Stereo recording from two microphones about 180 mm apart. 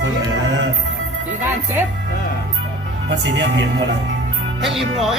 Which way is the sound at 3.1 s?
70° right (ahead or behind).